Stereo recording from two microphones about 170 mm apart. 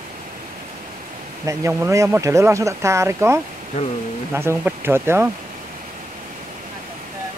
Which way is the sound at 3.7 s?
40° left (ahead or behind).